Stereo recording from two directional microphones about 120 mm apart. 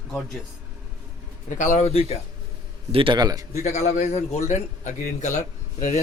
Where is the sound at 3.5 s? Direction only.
75° left (ahead or behind).